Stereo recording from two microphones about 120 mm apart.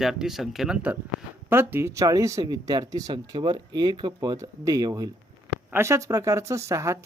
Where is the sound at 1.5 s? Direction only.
20° right (ahead or behind).